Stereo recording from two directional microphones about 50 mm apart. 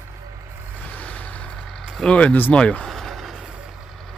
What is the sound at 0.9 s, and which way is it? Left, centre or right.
Vehicle, left.